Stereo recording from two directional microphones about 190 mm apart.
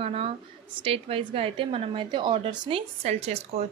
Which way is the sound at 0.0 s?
30° right (ahead or behind).